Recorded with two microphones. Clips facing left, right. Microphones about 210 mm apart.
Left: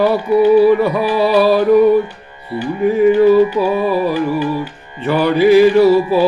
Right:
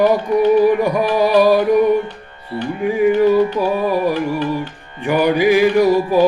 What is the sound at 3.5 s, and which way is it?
Music, 10° left (ahead or behind).